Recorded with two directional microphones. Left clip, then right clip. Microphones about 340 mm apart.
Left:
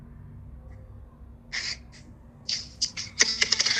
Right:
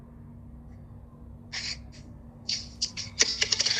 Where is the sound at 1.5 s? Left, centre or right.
Left.